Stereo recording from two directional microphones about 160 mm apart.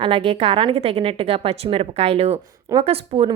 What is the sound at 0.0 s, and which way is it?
Speech, 35° right (ahead or behind).